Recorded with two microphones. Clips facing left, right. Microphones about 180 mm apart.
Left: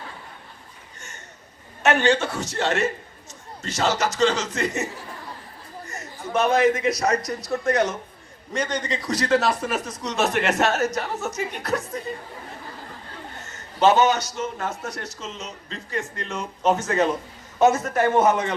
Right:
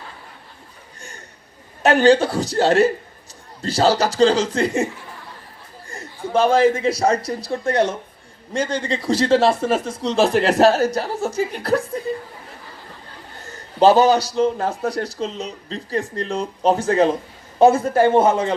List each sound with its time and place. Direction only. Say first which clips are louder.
1.8 s speech: right 6 dB; 35° right (ahead or behind)
5.9 s a man's voice: right 5 dB; 30° right (ahead or behind)
13.4 s a man's voice: right 5 dB; 35° right (ahead or behind)